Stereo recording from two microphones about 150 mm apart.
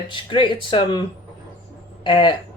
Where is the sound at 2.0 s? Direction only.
30° left (ahead or behind).